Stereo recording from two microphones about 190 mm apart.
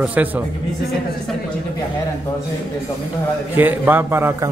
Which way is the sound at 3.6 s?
10° right (ahead or behind).